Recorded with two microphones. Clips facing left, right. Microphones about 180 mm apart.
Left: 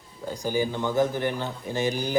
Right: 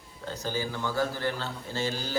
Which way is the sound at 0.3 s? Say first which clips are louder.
Left 6 dB; 15° left (ahead or behind).